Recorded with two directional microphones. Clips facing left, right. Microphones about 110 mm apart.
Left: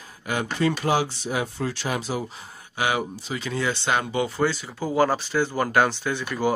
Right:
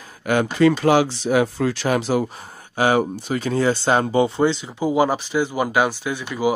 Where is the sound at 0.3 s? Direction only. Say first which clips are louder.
Right 8 dB; 85° right.